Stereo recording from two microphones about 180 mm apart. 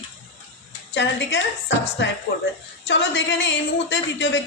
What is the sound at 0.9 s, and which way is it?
A woman's voice, 75° left (ahead or behind).